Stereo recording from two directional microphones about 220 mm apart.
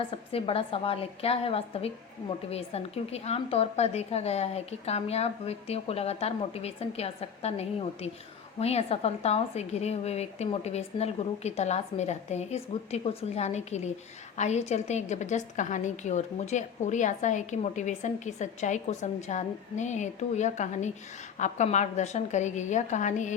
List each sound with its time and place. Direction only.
0.1 s a woman's voice: 25° left (ahead or behind)